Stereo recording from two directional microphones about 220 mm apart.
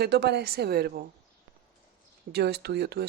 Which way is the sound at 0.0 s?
50° right (ahead or behind).